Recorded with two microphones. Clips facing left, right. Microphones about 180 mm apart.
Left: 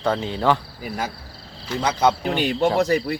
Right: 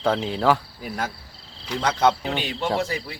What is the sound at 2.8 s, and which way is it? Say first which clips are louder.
Speech: left 8 dB; 45° left (ahead or behind).